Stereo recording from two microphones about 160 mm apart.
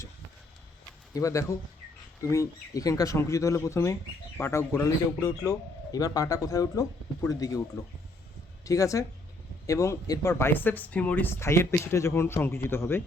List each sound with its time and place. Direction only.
1.1 s a man's voice: 20° left (ahead or behind)